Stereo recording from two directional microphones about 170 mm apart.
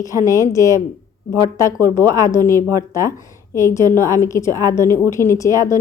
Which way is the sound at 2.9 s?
20° left (ahead or behind).